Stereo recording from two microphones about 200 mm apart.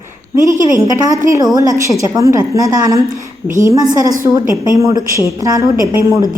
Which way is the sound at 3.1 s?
40° right (ahead or behind).